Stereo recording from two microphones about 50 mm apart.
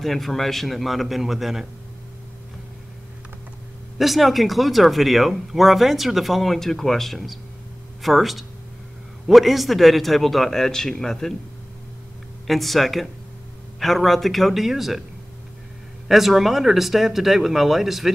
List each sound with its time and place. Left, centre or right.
0.0 s speech: centre
4.0 s speech: centre
12.4 s speech: centre
16.1 s speech: centre